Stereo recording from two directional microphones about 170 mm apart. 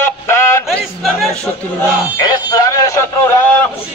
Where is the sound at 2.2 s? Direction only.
20° left (ahead or behind).